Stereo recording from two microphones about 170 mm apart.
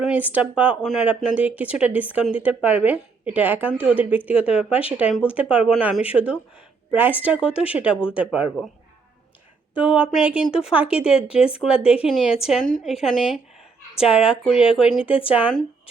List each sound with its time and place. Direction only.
0.0 s speech: 10° right (ahead or behind)
9.7 s speech: 10° right (ahead or behind)